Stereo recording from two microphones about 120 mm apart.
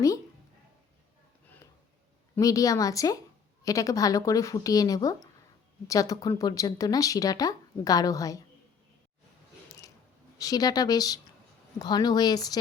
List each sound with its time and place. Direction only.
2.4 s speech: 30° left (ahead or behind)
10.3 s speech: 30° left (ahead or behind)